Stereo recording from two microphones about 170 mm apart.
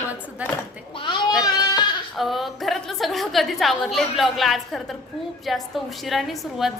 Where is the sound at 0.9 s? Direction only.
30° left (ahead or behind).